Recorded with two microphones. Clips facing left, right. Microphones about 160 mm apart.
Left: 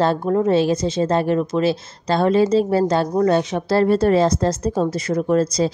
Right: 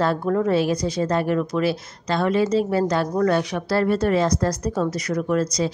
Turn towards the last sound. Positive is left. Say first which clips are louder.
# left 4 dB
turn(degrees=30)  # may be behind; listen again after turning